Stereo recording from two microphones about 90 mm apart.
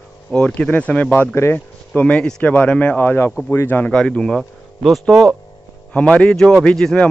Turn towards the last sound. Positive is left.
turn(degrees=10)  # may be behind; listen again after turning